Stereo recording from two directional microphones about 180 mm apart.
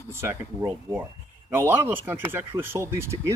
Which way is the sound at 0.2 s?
15° right (ahead or behind).